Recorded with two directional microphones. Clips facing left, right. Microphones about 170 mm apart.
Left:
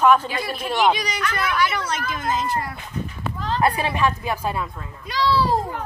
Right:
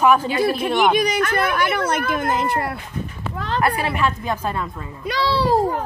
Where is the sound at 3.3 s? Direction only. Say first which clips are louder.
Right 2 dB; 65° right (ahead or behind).